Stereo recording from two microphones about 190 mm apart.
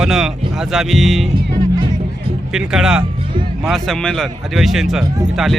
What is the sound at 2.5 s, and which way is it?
Speech, 5° right (ahead or behind).